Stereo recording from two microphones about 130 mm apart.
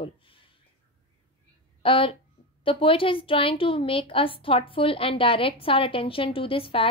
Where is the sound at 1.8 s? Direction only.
45° left (ahead or behind).